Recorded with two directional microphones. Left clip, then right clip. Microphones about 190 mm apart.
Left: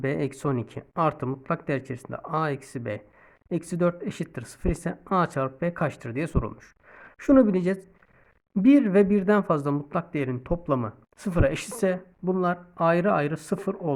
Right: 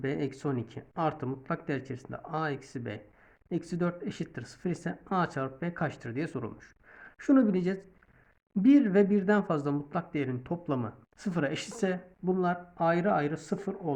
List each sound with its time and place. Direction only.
0.0 s speech: 40° left (ahead or behind)